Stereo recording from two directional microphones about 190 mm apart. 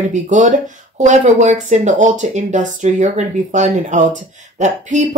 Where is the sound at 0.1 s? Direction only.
40° right (ahead or behind).